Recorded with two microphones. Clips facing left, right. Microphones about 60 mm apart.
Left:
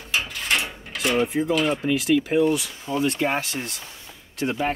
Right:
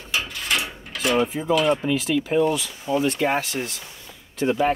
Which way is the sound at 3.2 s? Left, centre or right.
Centre.